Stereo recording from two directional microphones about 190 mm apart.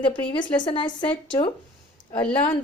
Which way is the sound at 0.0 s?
25° left (ahead or behind).